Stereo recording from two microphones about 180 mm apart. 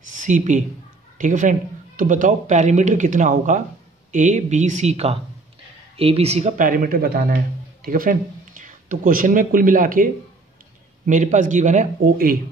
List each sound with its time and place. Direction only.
0.1 s speech: 45° right (ahead or behind)